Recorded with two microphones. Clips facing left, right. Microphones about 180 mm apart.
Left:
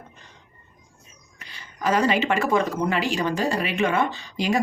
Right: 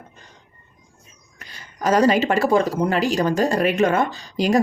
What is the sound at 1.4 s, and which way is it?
Speech, 40° right (ahead or behind).